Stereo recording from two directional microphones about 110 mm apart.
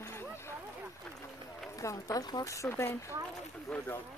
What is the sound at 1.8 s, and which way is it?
Speech, 30° left (ahead or behind).